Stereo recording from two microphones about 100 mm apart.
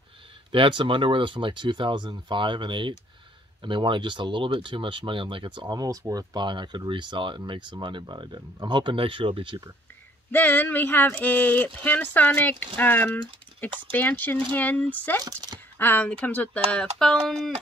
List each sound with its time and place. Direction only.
0.5 s speech: 55° right (ahead or behind)
10.3 s speech: 20° left (ahead or behind)
15.2 s speech: 40° right (ahead or behind)
15.8 s speech: 15° left (ahead or behind)